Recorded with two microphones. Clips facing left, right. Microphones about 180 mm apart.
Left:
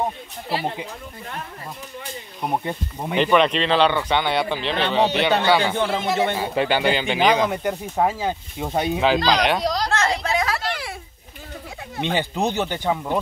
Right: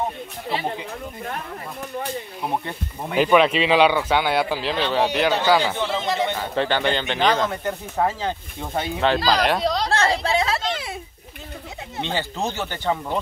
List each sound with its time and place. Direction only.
2.4 s speech: 15° left (ahead or behind)
3.2 s speech: 5° right (ahead or behind)
5.8 s speech: 50° left (ahead or behind)
6.3 s speech: 10° left (ahead or behind)
9.0 s speech: centre (ahead or behind)
9.8 s a sound: 30° right (ahead or behind)
12.0 s speech: 15° left (ahead or behind)